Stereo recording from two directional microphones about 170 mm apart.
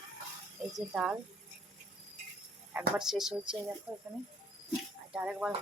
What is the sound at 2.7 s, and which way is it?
Speech, 5° right (ahead or behind).